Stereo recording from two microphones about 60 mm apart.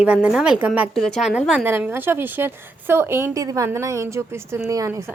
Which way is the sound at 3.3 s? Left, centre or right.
Right.